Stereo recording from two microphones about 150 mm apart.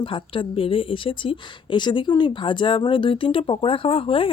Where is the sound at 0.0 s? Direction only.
35° left (ahead or behind).